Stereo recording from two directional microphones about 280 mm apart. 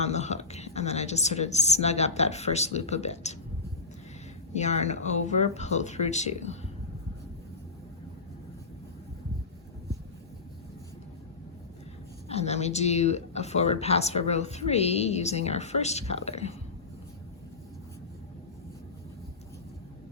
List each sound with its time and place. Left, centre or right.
0.0 s a woman's voice: left
4.5 s speech: left
12.3 s speech: left